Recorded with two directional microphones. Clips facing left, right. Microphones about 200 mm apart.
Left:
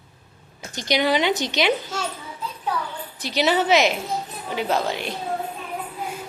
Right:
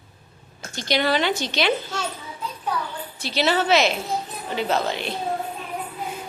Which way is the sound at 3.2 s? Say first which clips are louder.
Left 1 dB; 15° left (ahead or behind).